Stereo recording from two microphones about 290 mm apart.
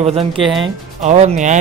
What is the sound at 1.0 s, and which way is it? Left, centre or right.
Speech, right.